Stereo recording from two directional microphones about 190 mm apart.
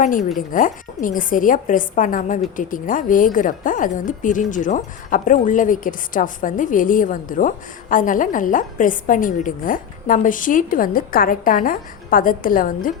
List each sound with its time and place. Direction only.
0.0 s a woman's voice: 45° left (ahead or behind)